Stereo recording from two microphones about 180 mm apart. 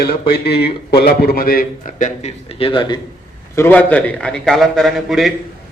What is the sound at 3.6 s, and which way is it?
A man's voice, 10° left (ahead or behind).